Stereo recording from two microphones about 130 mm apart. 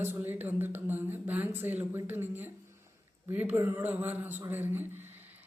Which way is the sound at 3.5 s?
15° right (ahead or behind).